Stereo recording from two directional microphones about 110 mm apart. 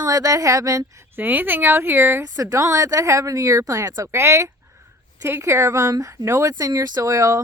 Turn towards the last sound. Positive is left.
turn(degrees=-30)  # may be behind; listen again after turning